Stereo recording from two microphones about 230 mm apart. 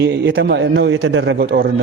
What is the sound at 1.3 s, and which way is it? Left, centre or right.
Speech, right.